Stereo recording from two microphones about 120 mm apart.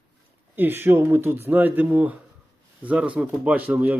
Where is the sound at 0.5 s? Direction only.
15° right (ahead or behind).